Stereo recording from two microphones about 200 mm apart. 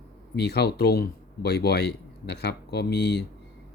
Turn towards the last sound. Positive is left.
turn(degrees=55)  # may be behind; listen again after turning